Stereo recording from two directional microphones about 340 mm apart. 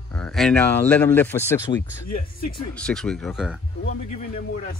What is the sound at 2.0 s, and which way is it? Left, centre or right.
Speech, left.